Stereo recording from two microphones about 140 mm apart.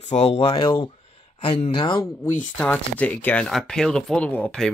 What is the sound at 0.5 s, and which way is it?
Speech, 30° left (ahead or behind).